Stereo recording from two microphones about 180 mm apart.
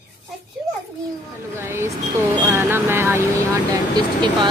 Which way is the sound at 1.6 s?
15° right (ahead or behind).